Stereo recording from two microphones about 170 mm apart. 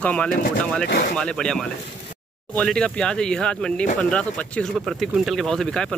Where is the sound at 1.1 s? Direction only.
5° left (ahead or behind).